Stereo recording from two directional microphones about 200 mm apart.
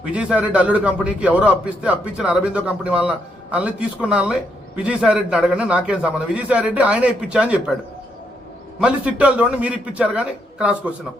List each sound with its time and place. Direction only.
0.0 s a man's voice: 5° right (ahead or behind)
8.8 s a man's voice: 5° right (ahead or behind)